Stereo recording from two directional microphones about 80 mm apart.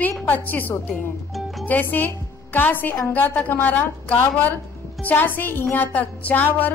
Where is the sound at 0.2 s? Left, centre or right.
Left.